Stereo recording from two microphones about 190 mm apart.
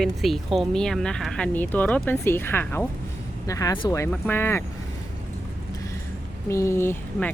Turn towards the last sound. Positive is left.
turn(degrees=10)  # may be behind; listen again after turning